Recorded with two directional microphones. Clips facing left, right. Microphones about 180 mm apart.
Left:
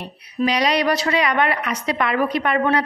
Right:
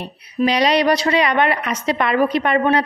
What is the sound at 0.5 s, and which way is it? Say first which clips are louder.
A woman's voice: right 3 dB; 25° right (ahead or behind).